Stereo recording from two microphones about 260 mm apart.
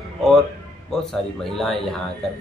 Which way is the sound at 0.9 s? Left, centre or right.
Centre.